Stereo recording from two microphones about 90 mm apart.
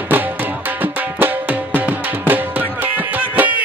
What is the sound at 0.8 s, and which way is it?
Music, 20° right (ahead or behind).